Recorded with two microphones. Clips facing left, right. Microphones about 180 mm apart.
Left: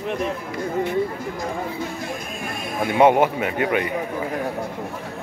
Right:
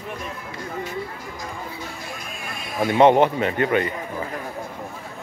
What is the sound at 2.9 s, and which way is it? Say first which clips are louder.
A man's voice: right 1 dB; 10° left (ahead or behind).